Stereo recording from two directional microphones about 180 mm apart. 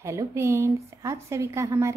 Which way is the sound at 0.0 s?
15° right (ahead or behind).